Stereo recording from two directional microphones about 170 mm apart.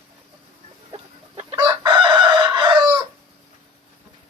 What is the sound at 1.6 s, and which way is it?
Chicken, 25° right (ahead or behind).